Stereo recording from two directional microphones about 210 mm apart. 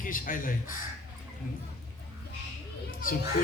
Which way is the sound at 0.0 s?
40° left (ahead or behind).